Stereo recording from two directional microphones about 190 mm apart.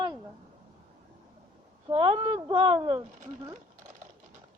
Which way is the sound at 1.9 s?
30° right (ahead or behind).